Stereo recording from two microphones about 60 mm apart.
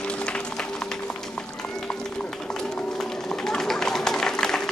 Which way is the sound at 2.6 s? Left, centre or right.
Centre.